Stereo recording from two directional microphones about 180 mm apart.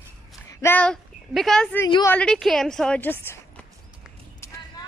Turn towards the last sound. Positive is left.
turn(degrees=15)  # may be behind; listen again after turning